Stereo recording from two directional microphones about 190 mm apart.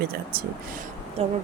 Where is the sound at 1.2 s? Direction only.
35° right (ahead or behind).